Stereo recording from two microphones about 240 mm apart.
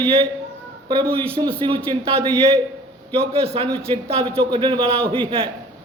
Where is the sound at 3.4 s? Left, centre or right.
Right.